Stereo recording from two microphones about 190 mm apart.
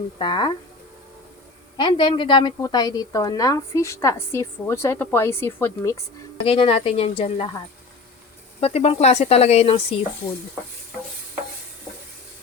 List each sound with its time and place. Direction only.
0.2 s a woman's voice: 25° left (ahead or behind)
1.7 s a woman's voice: 25° left (ahead or behind)
6.4 s a woman's voice: 30° left (ahead or behind)
8.6 s speech: 30° left (ahead or behind)